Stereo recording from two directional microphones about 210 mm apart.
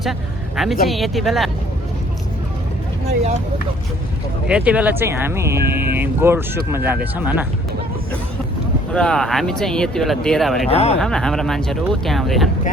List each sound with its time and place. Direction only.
0.0 s speech: centre (ahead or behind)
4.4 s speech: 5° right (ahead or behind)
8.9 s speech: 5° left (ahead or behind)
10.7 s speech: 30° left (ahead or behind)
11.0 s speech: centre (ahead or behind)